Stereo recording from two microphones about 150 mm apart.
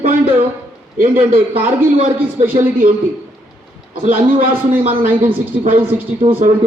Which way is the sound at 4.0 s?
70° right (ahead or behind).